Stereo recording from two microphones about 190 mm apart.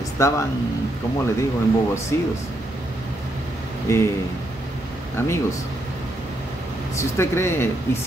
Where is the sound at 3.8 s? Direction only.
15° left (ahead or behind).